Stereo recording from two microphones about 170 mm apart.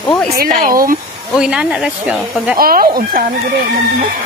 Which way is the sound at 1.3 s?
5° right (ahead or behind).